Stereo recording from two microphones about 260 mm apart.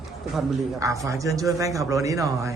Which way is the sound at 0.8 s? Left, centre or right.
Centre.